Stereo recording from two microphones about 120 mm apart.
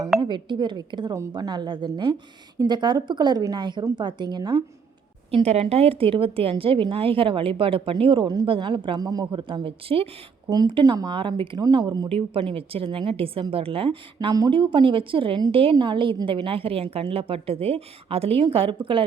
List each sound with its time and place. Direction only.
0.2 s speech: 40° right (ahead or behind)
5.3 s a woman's voice: 60° right (ahead or behind)
10.5 s speech: 40° right (ahead or behind)
12.0 s a woman's voice: 50° right (ahead or behind)